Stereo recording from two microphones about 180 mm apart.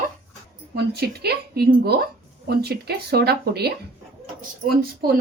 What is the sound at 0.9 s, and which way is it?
A woman's voice, 60° right (ahead or behind).